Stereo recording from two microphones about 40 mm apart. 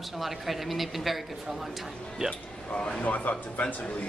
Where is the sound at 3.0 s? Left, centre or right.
Left.